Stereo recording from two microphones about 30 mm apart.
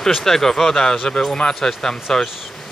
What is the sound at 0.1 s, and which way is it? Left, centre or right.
Speech, centre.